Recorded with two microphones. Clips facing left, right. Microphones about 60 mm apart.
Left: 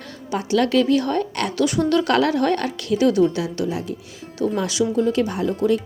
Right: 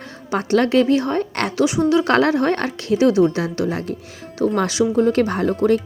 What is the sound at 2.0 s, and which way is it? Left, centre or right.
Speech, right.